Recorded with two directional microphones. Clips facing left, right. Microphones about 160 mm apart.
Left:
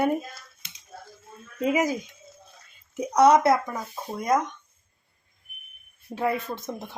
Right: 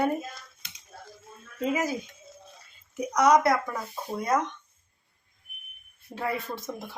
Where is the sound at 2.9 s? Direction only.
30° left (ahead or behind).